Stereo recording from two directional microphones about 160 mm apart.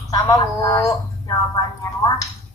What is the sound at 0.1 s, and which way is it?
Speech, 20° left (ahead or behind).